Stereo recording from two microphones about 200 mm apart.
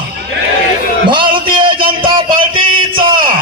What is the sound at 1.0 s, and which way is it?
A man's voice, 25° right (ahead or behind).